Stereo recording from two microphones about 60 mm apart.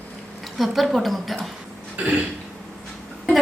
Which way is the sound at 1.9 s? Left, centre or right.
Right.